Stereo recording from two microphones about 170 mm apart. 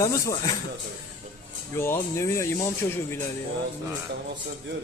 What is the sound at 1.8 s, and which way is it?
Speech, 15° left (ahead or behind).